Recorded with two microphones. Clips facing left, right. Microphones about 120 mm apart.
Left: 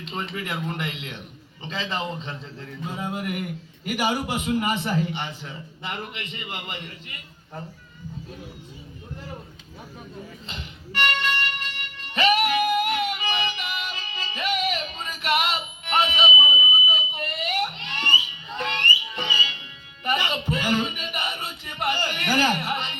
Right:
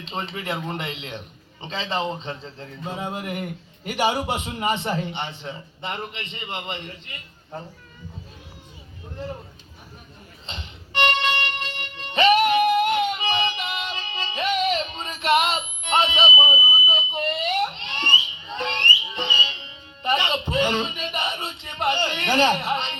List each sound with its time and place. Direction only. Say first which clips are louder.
0.0 s a man's voice: right 1 dB; 30° right (ahead or behind)
10.4 s music: left 1 dB; 30° right (ahead or behind)